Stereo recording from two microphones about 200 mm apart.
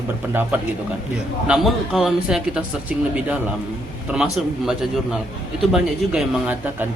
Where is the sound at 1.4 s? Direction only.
5° right (ahead or behind).